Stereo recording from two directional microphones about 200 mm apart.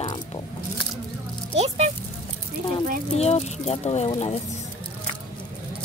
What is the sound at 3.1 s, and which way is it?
Speech, 30° left (ahead or behind).